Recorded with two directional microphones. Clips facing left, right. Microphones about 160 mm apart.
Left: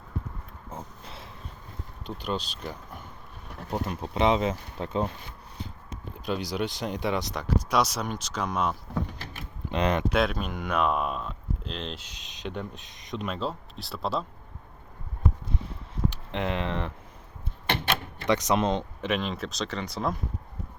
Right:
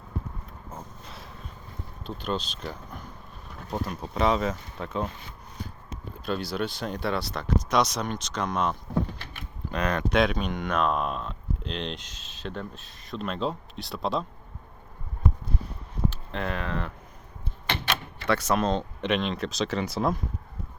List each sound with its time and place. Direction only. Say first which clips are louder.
2.0 s speech: right 1 dB; 10° left (ahead or behind); by 5.1 s 30° left (ahead or behind)
6.2 s speech: even; 15° left (ahead or behind)
9.7 s speech: left 2 dB; 20° left (ahead or behind)
10.1 s speech: right 2 dB; 5° left (ahead or behind); by 13.2 s 20° left (ahead or behind)
13.2 s speech: right 3 dB; 5° left (ahead or behind)
16.0 s speech: left 1 dB; 20° left (ahead or behind)
18.3 s speech: even; 15° left (ahead or behind)
19.0 s speech: right 3 dB; 5° left (ahead or behind)